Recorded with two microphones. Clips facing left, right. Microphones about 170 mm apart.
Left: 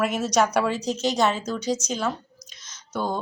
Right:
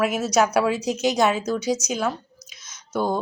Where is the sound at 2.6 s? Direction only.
10° right (ahead or behind).